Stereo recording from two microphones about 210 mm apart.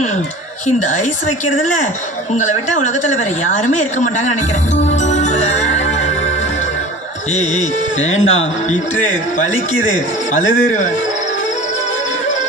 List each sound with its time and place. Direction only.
1.5 s a man's voice: 35° left (ahead or behind)
4.9 s music: 35° left (ahead or behind)
8.1 s speech: 70° left (ahead or behind)
9.8 s a man's voice: 35° left (ahead or behind)